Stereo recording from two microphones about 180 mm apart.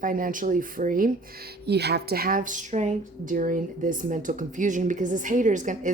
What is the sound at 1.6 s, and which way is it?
A woman's voice, 65° right (ahead or behind).